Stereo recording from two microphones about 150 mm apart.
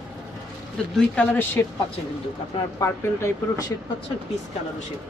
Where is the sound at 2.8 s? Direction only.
20° left (ahead or behind).